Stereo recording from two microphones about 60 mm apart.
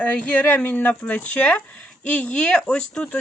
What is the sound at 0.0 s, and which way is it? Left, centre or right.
Speech, left.